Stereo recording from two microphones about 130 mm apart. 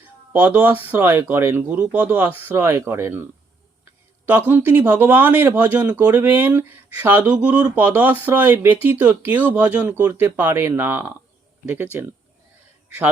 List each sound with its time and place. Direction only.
0.3 s speech: 15° right (ahead or behind)
4.3 s a man's voice: 15° right (ahead or behind)